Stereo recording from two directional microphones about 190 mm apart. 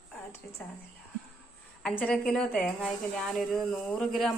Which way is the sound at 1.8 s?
5° left (ahead or behind).